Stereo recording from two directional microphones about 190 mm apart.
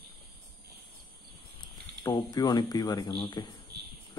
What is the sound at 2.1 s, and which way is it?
Speech, 20° left (ahead or behind).